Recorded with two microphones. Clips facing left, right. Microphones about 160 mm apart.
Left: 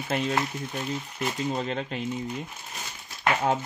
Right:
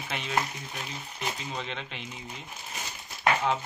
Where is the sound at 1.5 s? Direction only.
40° left (ahead or behind).